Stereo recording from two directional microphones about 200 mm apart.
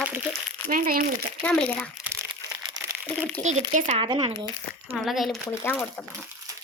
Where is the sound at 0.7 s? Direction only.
45° right (ahead or behind).